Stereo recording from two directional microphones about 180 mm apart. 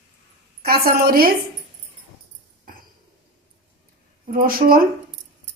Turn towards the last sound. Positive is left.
turn(degrees=-55)  # may be behind; listen again after turning